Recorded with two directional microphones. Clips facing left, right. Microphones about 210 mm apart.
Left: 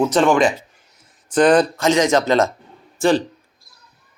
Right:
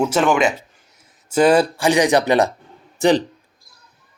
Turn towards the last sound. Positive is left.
turn(degrees=-20)  # may be behind; listen again after turning